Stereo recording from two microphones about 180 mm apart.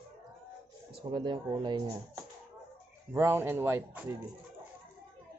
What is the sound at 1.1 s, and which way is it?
Speech, 25° right (ahead or behind).